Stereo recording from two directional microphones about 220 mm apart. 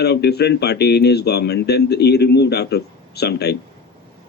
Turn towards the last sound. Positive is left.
turn(degrees=50)  # may be behind; listen again after turning